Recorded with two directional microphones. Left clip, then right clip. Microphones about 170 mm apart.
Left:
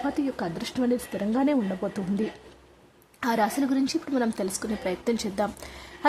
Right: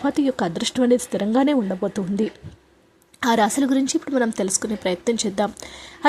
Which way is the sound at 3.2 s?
25° right (ahead or behind).